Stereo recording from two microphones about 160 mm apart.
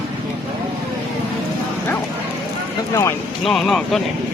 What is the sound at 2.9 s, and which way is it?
Speech, 20° left (ahead or behind).